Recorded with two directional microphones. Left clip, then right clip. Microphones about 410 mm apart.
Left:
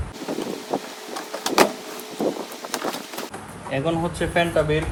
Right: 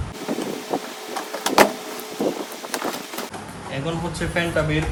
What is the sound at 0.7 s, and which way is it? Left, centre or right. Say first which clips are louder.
Vehicle: right 2 dB; centre.